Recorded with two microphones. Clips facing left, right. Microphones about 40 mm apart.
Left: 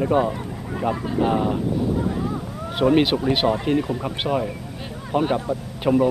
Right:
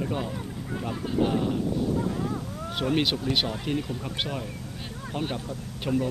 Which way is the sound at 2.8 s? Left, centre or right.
Centre.